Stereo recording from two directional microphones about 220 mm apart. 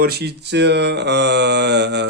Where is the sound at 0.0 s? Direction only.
45° right (ahead or behind).